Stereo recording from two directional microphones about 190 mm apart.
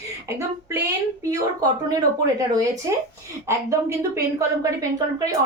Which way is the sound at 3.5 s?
15° right (ahead or behind).